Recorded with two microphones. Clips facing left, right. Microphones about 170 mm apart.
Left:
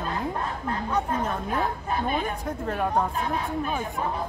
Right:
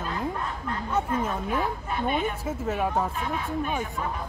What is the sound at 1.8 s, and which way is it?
Speech, 40° left (ahead or behind).